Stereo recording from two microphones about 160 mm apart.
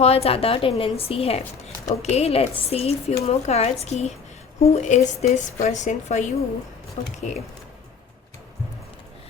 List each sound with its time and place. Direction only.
0.0 s a woman's voice: 40° left (ahead or behind)